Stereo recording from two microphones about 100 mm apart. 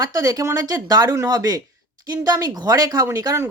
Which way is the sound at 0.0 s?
35° right (ahead or behind).